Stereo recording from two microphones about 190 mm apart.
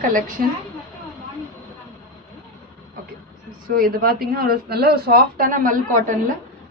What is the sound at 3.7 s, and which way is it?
A woman's voice, 50° right (ahead or behind).